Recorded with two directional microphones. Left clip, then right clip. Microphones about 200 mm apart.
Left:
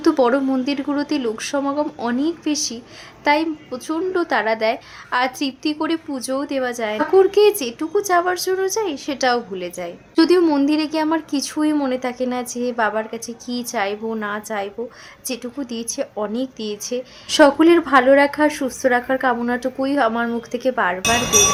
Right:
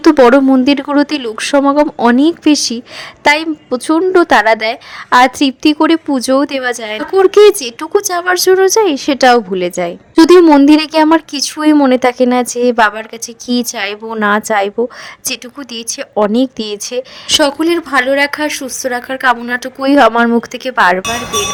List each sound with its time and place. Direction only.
0.0 s speech: 45° right (ahead or behind)
18.6 s a woman's voice: centre (ahead or behind)
19.2 s speech: 50° right (ahead or behind)